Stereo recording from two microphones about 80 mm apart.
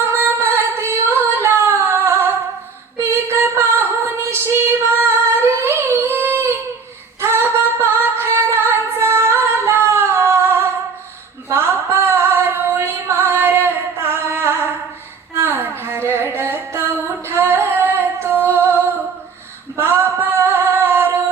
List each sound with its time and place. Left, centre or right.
0.1 s singing: right
3.0 s female singing: right
11.4 s music: right
19.7 s female singing: right